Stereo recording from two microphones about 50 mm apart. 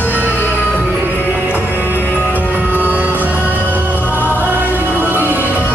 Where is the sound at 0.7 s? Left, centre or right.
Left.